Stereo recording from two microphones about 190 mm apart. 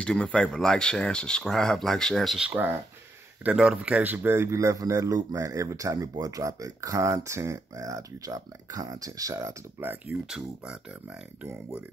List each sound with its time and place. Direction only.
0.0 s speech: 5° left (ahead or behind)